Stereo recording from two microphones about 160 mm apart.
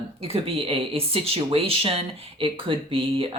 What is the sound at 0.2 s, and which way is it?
A woman's voice, 35° right (ahead or behind).